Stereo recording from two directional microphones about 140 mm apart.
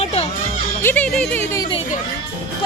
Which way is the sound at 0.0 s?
45° left (ahead or behind).